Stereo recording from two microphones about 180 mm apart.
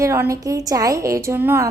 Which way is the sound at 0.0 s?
15° right (ahead or behind).